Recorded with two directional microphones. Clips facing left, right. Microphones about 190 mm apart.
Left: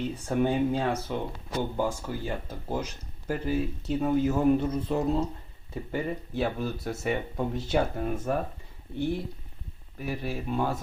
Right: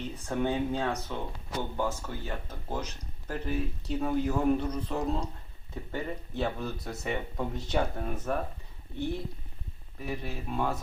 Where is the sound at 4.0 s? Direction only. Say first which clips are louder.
Left 4 dB; 5° left (ahead or behind).